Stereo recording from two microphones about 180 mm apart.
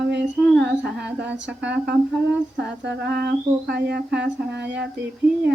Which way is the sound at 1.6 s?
70° right (ahead or behind).